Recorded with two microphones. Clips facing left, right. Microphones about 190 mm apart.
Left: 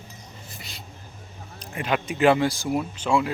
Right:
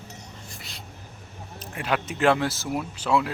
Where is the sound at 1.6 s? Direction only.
Centre (ahead or behind).